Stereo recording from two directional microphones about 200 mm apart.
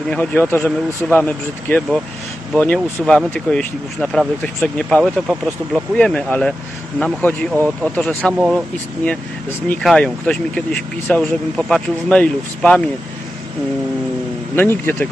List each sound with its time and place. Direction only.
0.1 s speech: 10° left (ahead or behind)
14.5 s speech: 10° left (ahead or behind)